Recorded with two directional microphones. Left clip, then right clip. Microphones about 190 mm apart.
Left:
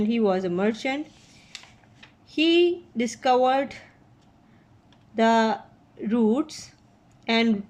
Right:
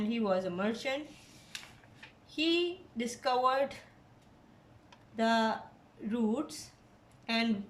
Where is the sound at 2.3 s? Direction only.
45° left (ahead or behind).